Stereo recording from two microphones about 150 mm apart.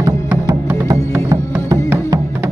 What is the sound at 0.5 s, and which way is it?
Music, 20° right (ahead or behind).